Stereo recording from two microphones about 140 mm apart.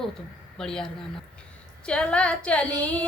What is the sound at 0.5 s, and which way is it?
Speech, 5° left (ahead or behind).